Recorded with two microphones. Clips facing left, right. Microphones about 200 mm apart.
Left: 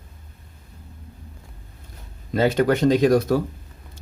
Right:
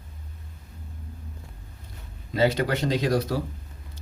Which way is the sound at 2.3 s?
50° left (ahead or behind).